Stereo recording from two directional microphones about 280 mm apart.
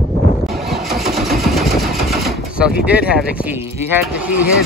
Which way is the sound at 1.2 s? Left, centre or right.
Centre.